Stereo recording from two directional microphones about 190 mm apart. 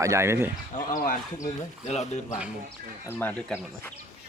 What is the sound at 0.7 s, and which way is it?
Speech, 45° left (ahead or behind).